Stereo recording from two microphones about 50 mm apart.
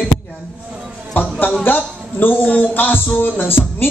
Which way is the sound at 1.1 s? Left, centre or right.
Left.